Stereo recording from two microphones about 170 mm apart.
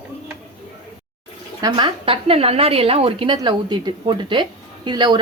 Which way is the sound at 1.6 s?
25° right (ahead or behind).